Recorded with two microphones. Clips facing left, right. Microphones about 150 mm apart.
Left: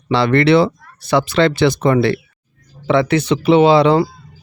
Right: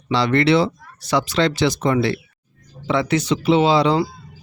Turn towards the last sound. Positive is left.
turn(degrees=60)  # may be behind; listen again after turning